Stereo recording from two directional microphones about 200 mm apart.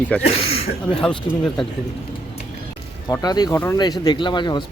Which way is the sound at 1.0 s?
5° left (ahead or behind).